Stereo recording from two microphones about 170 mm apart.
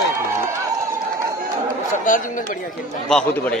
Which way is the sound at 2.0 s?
50° left (ahead or behind).